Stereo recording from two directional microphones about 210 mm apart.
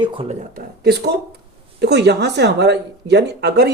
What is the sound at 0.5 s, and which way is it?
Speech, 50° right (ahead or behind).